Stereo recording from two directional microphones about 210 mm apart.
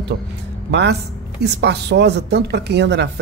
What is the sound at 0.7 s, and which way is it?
A woman's voice, 55° right (ahead or behind).